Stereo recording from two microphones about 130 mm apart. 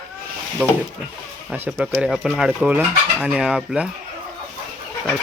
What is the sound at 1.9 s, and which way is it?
Chicken, centre (ahead or behind).